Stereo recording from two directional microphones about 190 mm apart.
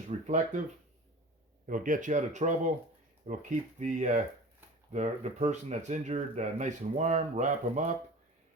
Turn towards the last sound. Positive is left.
turn(degrees=-40)  # may be behind; listen again after turning